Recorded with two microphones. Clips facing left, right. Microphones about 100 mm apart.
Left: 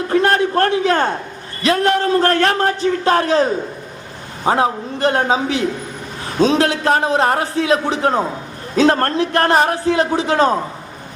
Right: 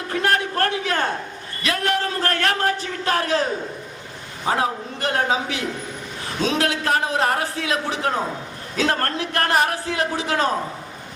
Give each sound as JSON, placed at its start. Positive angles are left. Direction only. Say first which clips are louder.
{"t": 0.1, "sound": "a sound", "louder": "left 6 dB", "side_deg": 30}
{"t": 1.6, "sound": "a man's voice", "louder": "left 7 dB", "side_deg": 30}
{"t": 4.4, "sound": "a man's voice", "louder": "left 6 dB", "side_deg": 30}